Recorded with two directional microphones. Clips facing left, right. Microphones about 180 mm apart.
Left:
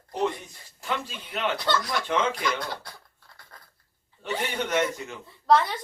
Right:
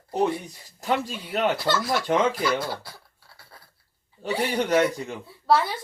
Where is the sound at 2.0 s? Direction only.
40° right (ahead or behind).